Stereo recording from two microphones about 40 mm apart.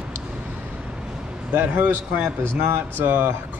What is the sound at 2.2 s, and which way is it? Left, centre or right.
Speech, right.